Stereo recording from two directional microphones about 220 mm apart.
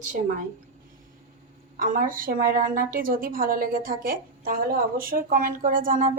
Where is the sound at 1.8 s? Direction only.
40° right (ahead or behind).